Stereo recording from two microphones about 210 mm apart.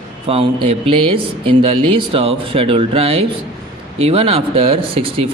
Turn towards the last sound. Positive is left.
turn(degrees=-25)  # may be behind; listen again after turning